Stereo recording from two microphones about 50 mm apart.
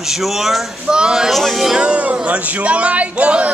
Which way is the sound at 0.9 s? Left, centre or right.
Centre.